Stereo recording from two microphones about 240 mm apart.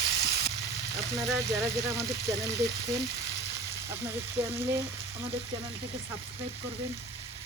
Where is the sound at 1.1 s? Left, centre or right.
Centre.